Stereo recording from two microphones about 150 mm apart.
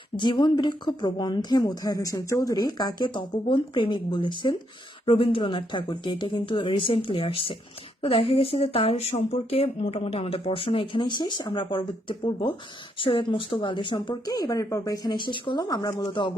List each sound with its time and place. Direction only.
0.2 s speech: 30° left (ahead or behind)